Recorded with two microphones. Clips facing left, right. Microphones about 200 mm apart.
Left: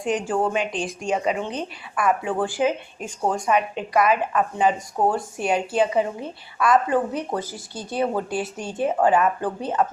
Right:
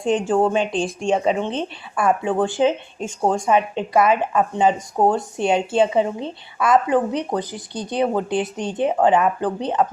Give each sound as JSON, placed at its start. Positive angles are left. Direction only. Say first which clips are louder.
{"t": 0.0, "sound": "speech", "louder": "right 5 dB", "side_deg": -25}